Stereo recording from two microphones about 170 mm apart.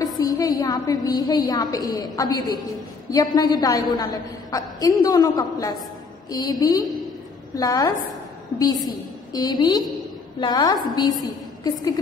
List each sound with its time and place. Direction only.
0.0 s a woman's voice: 20° left (ahead or behind)